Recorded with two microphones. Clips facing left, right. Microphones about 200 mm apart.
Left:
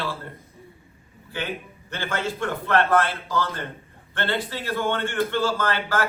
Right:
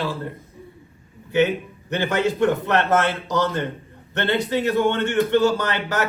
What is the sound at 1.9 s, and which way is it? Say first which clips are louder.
A man's voice: right 7 dB; 15° right (ahead or behind).